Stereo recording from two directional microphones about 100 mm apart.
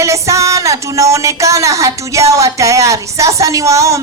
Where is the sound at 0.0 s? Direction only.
30° right (ahead or behind).